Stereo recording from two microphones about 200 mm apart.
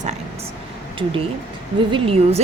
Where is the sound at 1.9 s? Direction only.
25° right (ahead or behind).